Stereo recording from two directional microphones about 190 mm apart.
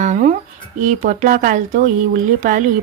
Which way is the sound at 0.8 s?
40° right (ahead or behind).